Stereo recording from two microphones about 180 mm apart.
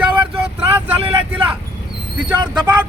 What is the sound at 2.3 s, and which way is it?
Speech, 25° right (ahead or behind).